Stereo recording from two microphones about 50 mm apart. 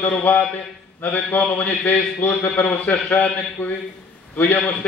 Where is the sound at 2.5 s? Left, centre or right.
Left.